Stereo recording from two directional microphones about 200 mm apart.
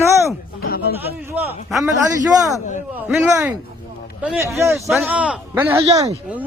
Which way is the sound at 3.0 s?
5° right (ahead or behind).